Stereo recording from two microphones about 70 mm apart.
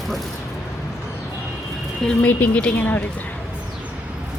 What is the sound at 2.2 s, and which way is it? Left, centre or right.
Speech, centre.